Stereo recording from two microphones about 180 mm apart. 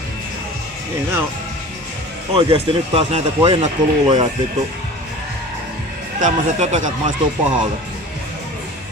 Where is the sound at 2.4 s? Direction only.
30° right (ahead or behind).